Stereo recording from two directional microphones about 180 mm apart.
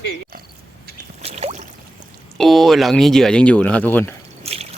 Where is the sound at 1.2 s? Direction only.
35° right (ahead or behind).